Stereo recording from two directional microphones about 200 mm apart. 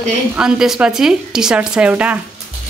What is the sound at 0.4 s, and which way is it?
Speech, 5° right (ahead or behind).